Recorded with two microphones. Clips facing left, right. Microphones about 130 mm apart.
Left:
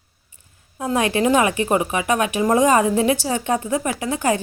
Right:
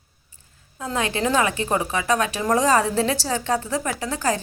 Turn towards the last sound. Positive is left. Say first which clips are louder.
# left 3 dB
turn(degrees=15)  # may be behind; listen again after turning